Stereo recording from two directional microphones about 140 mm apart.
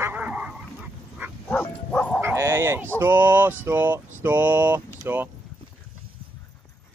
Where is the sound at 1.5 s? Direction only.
10° left (ahead or behind).